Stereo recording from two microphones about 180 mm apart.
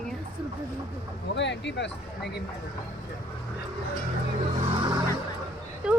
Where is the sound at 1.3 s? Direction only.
80° left.